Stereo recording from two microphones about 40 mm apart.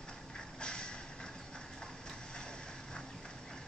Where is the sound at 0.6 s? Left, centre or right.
Left.